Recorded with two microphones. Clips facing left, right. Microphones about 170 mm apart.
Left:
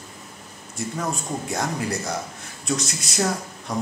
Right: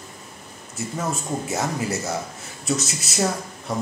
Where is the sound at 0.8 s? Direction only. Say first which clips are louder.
Even; 5° right (ahead or behind).